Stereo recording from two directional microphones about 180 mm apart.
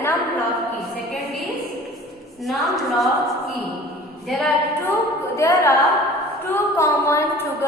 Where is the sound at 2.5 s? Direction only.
Centre (ahead or behind).